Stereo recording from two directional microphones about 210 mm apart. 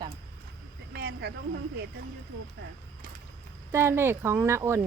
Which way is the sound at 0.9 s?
50° right (ahead or behind).